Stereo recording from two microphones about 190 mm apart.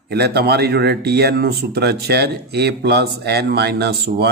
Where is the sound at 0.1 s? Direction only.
60° right (ahead or behind).